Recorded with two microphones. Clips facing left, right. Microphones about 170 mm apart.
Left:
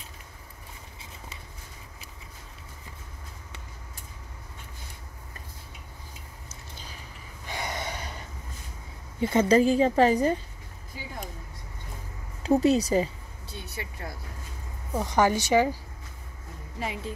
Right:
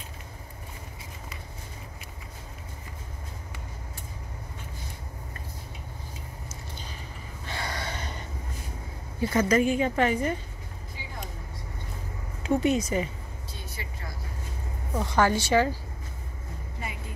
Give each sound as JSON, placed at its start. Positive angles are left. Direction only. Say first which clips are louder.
{"t": 7.4, "sound": "a sound", "louder": "left 1 dB", "side_deg": 15}
{"t": 9.2, "sound": "speech", "louder": "left 2 dB", "side_deg": 25}
{"t": 12.4, "sound": "speech", "louder": "left 3 dB", "side_deg": 35}
{"t": 15.0, "sound": "a woman's voice", "louder": "left 1 dB", "side_deg": 15}